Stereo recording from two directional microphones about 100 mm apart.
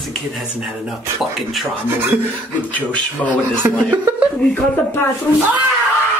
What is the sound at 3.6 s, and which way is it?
Chuckle, 15° right (ahead or behind).